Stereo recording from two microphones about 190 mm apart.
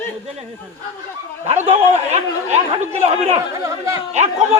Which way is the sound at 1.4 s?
35° right (ahead or behind).